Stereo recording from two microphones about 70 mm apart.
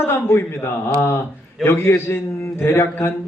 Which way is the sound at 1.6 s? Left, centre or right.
Left.